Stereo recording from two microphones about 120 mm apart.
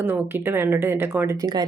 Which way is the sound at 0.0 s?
20° right (ahead or behind).